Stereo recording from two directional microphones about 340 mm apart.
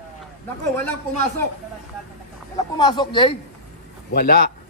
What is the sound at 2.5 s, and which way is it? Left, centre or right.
Speech, centre.